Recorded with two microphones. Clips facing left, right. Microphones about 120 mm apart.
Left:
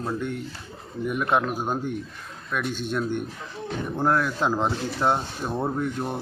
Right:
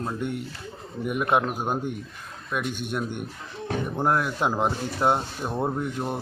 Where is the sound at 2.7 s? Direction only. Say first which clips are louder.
Left 2 dB; 55° right (ahead or behind).